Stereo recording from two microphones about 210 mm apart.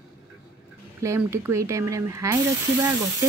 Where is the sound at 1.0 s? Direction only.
15° right (ahead or behind).